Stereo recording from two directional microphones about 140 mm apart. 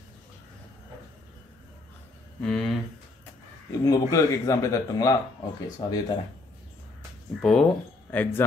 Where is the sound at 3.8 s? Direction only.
25° left (ahead or behind).